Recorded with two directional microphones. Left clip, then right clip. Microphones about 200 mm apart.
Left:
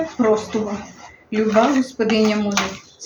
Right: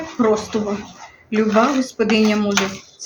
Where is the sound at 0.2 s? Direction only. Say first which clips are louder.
Right 1 dB; 15° right (ahead or behind).